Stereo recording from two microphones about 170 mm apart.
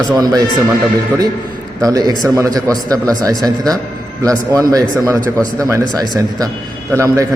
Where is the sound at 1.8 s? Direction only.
20° right (ahead or behind).